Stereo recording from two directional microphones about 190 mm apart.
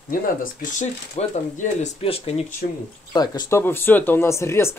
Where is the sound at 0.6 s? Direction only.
40° left (ahead or behind).